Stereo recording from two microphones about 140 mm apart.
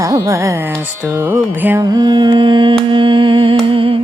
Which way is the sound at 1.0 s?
15° right (ahead or behind).